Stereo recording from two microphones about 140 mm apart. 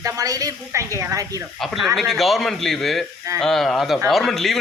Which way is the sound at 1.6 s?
Centre (ahead or behind).